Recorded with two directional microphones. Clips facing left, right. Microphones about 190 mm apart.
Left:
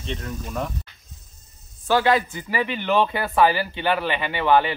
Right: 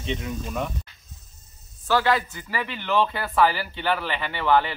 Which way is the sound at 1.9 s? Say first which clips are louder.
Left 3 dB; 20° left (ahead or behind).